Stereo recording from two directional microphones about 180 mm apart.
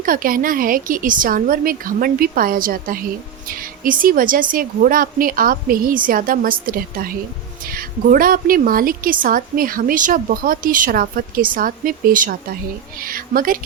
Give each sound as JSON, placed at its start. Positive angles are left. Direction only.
{"t": 0.0, "sound": "speech", "side_deg": -50}